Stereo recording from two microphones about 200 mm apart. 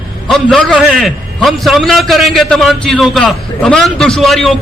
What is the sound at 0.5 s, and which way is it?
A man's voice, 5° left (ahead or behind).